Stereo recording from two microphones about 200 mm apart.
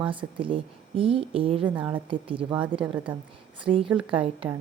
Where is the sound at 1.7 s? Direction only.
10° right (ahead or behind).